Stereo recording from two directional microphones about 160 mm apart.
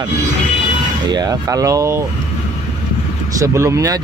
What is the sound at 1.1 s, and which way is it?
Speech, 25° right (ahead or behind).